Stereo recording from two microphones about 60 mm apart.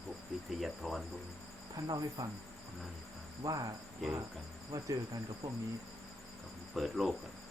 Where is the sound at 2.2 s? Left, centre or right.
Right.